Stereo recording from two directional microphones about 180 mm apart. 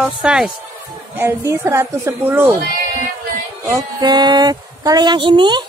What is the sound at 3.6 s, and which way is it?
Speech, 20° right (ahead or behind).